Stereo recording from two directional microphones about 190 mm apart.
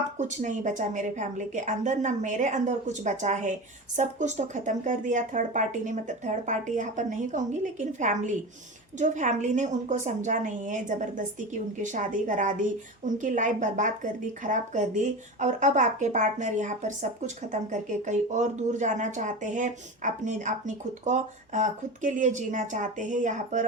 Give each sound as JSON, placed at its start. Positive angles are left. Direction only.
{"t": 0.2, "sound": "a woman's voice", "side_deg": -40}